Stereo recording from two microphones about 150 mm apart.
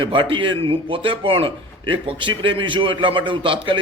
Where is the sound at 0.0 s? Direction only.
35° right (ahead or behind).